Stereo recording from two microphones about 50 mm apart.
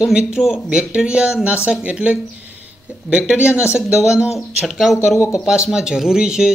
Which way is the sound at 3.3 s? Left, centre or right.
Right.